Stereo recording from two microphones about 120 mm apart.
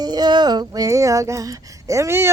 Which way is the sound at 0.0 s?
35° right (ahead or behind).